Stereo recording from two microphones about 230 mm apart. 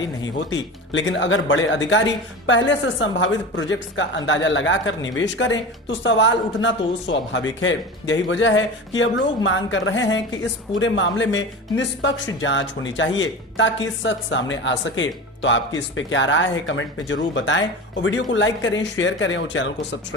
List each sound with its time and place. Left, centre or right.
0.2 s a woman's voice: left